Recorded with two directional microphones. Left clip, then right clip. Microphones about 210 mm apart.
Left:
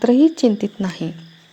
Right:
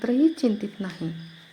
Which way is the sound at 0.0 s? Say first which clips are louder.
Left 8 dB; 25° left (ahead or behind).